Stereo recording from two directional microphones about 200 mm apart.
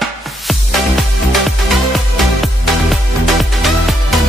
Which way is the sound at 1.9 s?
Centre (ahead or behind).